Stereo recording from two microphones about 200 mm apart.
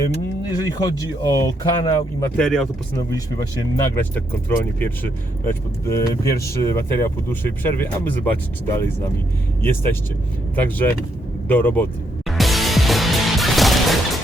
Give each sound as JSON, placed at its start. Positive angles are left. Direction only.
{"t": 0.6, "sound": "speech", "side_deg": 20}
{"t": 2.4, "sound": "speech", "side_deg": 5}
{"t": 3.8, "sound": "speech", "side_deg": 10}
{"t": 9.6, "sound": "speech", "side_deg": 10}
{"t": 12.3, "sound": "music", "side_deg": 0}